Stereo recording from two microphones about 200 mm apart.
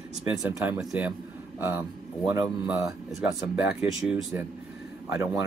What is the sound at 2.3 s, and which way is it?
Speech, 10° right (ahead or behind).